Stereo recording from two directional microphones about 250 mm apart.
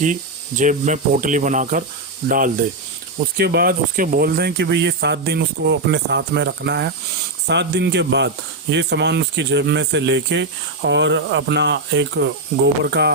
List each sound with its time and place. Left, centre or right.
0.0 s speech: right